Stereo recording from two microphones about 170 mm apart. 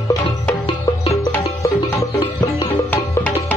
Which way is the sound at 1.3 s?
20° left (ahead or behind).